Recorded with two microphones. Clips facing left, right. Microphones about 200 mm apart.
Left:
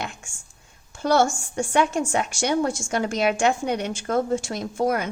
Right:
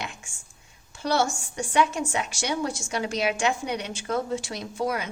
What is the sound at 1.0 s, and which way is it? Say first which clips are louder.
A woman's voice: left 5 dB; 50° left (ahead or behind).